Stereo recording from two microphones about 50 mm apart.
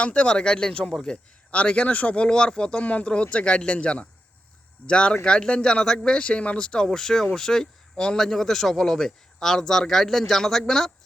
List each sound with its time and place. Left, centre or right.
0.0 s speech: left
2.8 s speech: left
6.8 s speech: centre